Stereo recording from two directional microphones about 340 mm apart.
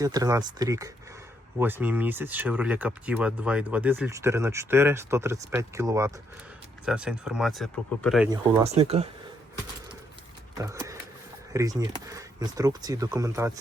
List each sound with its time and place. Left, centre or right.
0.0 s speech: centre
8.3 s speech: centre
10.6 s a sound: centre
11.5 s speech: centre